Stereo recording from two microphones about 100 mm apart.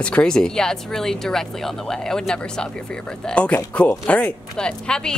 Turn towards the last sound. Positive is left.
turn(degrees=10)  # may be behind; listen again after turning